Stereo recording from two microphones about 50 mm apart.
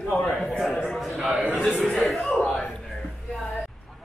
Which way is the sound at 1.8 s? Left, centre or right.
Centre.